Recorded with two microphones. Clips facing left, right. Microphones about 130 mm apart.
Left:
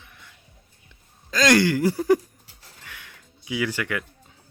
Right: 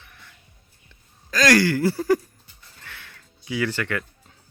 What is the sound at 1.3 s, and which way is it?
Speech, 20° left (ahead or behind).